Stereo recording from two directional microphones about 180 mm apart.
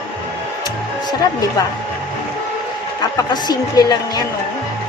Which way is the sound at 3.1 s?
20° left (ahead or behind).